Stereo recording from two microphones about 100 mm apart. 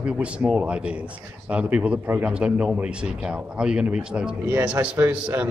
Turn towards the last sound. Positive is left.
turn(degrees=-20)  # may be behind; listen again after turning